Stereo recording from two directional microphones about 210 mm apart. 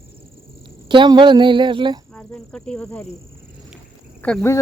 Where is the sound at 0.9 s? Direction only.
20° right (ahead or behind).